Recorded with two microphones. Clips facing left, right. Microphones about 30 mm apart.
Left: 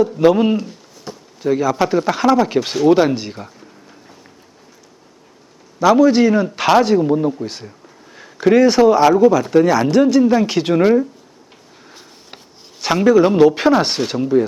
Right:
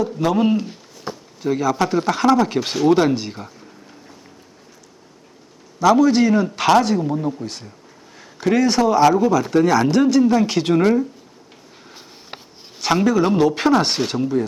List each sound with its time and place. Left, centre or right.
0.3 s speech: centre
1.1 s a sound: centre
1.4 s speech: centre
5.8 s speech: centre
12.8 s speech: centre